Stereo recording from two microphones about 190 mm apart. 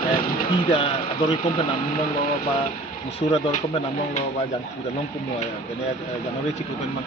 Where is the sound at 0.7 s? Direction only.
30° left (ahead or behind).